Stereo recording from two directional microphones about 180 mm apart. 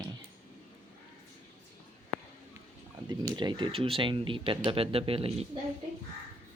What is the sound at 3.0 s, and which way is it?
A woman's voice, 25° right (ahead or behind).